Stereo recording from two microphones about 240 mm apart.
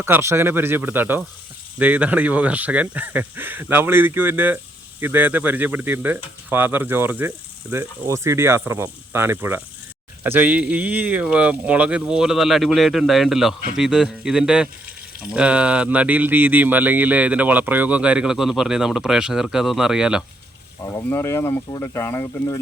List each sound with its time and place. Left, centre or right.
0.0 s speech: centre
20.8 s speech: centre